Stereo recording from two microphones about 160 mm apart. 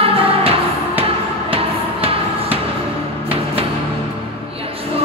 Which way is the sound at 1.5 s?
35° right (ahead or behind).